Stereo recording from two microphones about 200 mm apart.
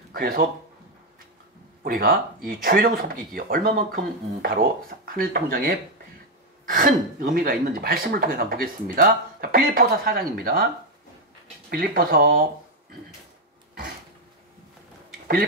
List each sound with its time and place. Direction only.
0.1 s speech: 45° right (ahead or behind)
1.9 s speech: 45° right (ahead or behind)
11.7 s speech: 45° right (ahead or behind)